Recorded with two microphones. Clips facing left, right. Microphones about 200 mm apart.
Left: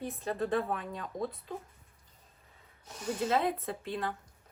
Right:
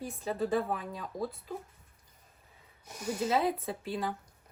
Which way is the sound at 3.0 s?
10° right (ahead or behind).